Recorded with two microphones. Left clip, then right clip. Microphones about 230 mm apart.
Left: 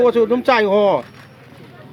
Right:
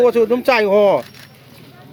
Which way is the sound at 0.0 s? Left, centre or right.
Right.